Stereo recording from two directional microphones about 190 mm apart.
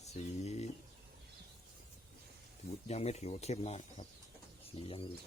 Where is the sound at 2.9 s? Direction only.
35° left (ahead or behind).